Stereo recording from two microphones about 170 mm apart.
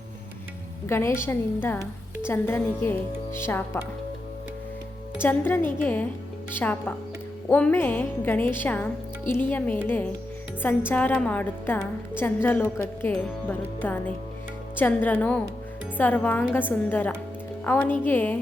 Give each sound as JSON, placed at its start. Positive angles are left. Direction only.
{"t": 0.9, "sound": "a woman's voice", "side_deg": 15}
{"t": 5.2, "sound": "a woman's voice", "side_deg": 10}